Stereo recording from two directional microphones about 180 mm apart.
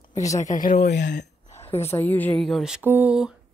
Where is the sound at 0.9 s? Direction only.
70° left (ahead or behind).